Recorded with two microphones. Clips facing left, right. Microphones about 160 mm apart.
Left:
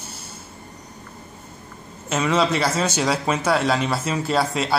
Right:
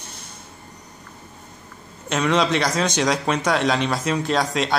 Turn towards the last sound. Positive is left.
turn(degrees=5)  # may be behind; listen again after turning